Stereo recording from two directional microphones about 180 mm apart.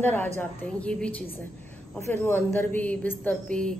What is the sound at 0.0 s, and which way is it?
Speech, 10° left (ahead or behind).